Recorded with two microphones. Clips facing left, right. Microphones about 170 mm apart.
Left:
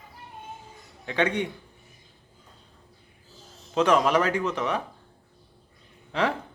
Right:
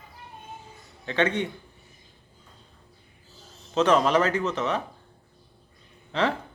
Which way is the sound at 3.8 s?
10° left (ahead or behind).